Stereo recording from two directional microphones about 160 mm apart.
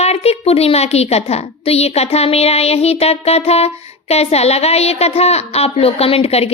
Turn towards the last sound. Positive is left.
turn(degrees=40)  # may be behind; listen again after turning